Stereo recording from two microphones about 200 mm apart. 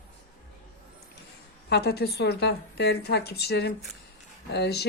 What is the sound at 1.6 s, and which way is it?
A woman's voice, 55° left (ahead or behind).